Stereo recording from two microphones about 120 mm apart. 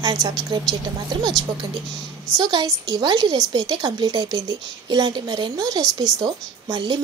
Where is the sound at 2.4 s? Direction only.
35° right (ahead or behind).